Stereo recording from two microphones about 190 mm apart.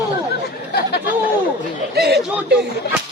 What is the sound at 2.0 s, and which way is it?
Speech, 60° right (ahead or behind).